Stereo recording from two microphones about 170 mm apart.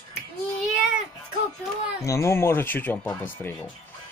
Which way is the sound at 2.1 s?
15° left (ahead or behind).